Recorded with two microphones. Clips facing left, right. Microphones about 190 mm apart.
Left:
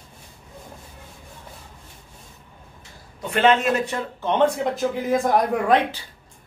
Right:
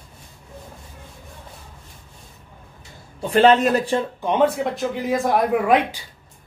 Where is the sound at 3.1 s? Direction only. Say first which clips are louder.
Right 4 dB; 35° right (ahead or behind).